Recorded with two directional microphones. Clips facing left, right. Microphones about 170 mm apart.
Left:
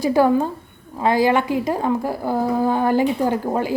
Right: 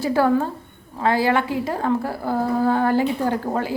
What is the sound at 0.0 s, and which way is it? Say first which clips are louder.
A woman's voice: left 2 dB; 15° left (ahead or behind).